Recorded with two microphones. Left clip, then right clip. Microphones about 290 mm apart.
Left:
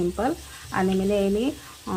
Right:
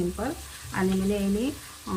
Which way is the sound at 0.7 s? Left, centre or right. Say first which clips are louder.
Left 5 dB; centre.